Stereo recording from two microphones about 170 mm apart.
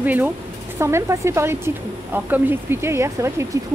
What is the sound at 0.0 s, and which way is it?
Speech, 10° right (ahead or behind).